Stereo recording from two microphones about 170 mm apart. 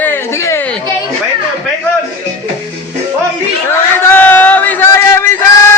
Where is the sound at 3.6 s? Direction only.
10° left (ahead or behind).